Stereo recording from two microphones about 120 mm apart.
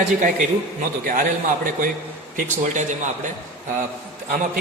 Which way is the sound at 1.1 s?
90° right.